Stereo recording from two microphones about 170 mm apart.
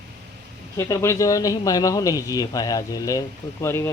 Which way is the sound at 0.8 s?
15° left (ahead or behind).